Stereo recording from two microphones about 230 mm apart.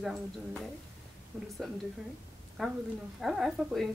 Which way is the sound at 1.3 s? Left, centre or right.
Centre.